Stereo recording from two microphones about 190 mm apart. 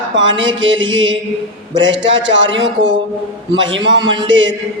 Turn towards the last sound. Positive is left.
turn(degrees=-85)